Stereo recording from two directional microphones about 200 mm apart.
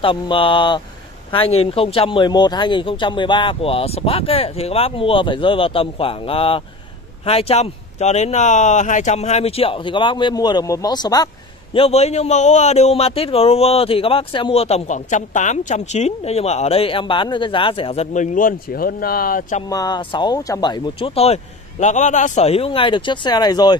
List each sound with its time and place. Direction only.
0.0 s speech: 25° left (ahead or behind)
11.7 s a man's voice: 30° left (ahead or behind)
19.7 s speech: 20° left (ahead or behind)